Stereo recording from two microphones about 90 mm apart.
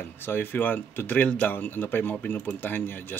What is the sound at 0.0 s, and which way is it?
A man's voice, 25° left (ahead or behind).